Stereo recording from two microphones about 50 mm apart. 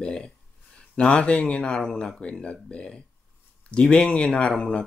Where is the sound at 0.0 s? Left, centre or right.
Centre.